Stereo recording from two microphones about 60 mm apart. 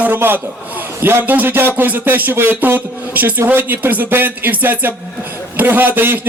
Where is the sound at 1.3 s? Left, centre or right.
Right.